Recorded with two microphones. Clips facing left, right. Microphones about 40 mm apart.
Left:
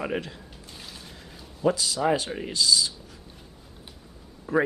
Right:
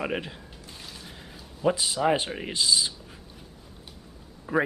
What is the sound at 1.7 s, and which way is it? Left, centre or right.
Speech, right.